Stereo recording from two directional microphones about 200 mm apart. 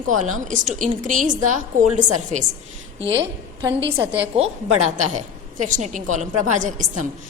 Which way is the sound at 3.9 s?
10° right (ahead or behind).